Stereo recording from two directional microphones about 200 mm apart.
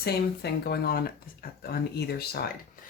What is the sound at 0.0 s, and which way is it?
Speech, 55° left (ahead or behind).